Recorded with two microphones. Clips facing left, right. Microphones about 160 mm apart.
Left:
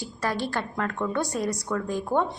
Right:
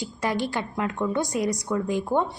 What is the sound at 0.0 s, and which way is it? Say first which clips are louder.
A woman's voice: right 2 dB; 15° right (ahead or behind).